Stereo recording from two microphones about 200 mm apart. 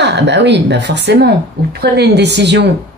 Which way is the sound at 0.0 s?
60° right (ahead or behind).